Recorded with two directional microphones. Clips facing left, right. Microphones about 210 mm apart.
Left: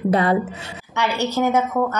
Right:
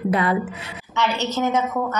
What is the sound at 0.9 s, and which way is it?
Speech, 10° left (ahead or behind).